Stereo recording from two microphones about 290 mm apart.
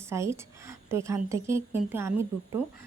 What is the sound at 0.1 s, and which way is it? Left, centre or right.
A woman's voice, centre.